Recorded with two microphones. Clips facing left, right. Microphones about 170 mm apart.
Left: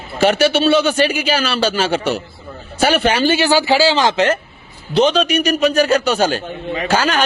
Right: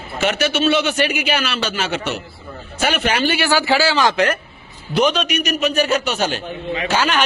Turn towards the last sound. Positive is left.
turn(degrees=35)  # may be behind; listen again after turning